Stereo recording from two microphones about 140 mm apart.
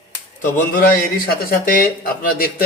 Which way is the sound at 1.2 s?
90° left.